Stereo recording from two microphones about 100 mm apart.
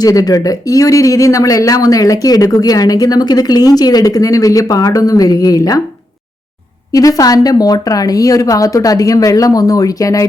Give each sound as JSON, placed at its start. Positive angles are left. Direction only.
{"t": 0.0, "sound": "speech", "side_deg": 40}
{"t": 6.9, "sound": "speech", "side_deg": 35}